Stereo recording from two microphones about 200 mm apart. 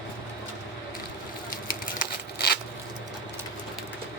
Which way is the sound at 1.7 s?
45° left (ahead or behind).